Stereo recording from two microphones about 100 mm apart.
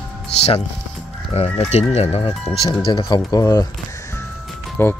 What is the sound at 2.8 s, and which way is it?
Speech, 55° left (ahead or behind).